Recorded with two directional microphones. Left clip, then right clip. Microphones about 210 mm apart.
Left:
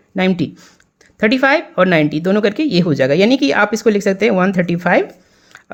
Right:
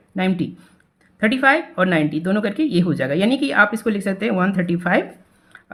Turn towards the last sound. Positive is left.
turn(degrees=35)  # may be behind; listen again after turning